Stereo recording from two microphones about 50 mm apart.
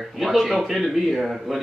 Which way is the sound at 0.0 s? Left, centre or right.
Centre.